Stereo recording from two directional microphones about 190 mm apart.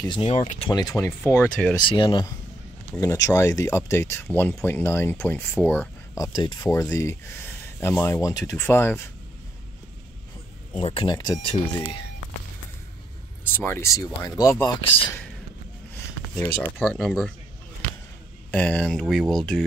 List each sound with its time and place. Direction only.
0.0 s speech: 25° left (ahead or behind)
0.4 s speech: 40° left (ahead or behind)
0.7 s speech: 20° left (ahead or behind)
1.8 s speech: 25° left (ahead or behind)
10.7 s speech: 30° left (ahead or behind)
13.5 s speech: 10° left (ahead or behind)
14.8 s speech: 25° left (ahead or behind)
16.3 s speech: 10° left (ahead or behind)
18.5 s speech: 5° left (ahead or behind)